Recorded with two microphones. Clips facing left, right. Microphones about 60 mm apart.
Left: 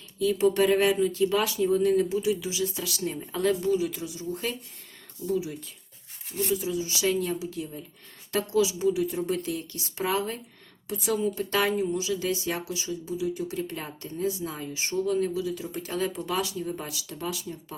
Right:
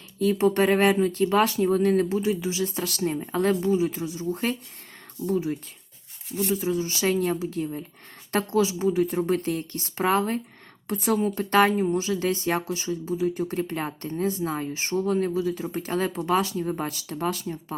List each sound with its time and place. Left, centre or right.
0.2 s speech: right